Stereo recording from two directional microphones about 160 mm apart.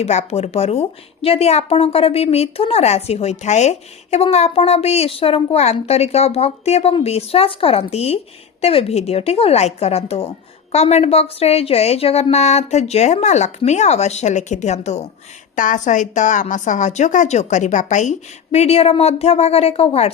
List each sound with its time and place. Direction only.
0.0 s a woman's voice: 45° left (ahead or behind)
15.5 s a woman's voice: 55° left (ahead or behind); by 20.1 s 40° left (ahead or behind)